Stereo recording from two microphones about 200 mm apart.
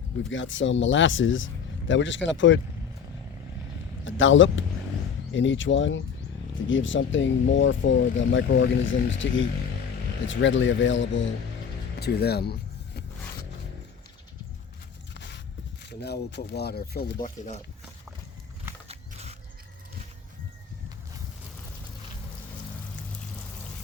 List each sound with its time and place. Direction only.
0.3 s speech: 70° left (ahead or behind)
4.0 s speech: 70° left (ahead or behind)
11.9 s speech: 55° left (ahead or behind)
15.1 s a sound: 60° left (ahead or behind)
15.8 s speech: 55° left (ahead or behind); by 17.6 s 40° left (ahead or behind)
18.9 s a sound: 30° right (ahead or behind)